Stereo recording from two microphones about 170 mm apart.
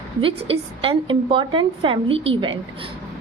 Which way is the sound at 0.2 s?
35° right (ahead or behind).